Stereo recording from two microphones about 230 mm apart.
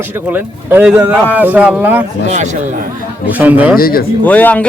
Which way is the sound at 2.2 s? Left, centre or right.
Right.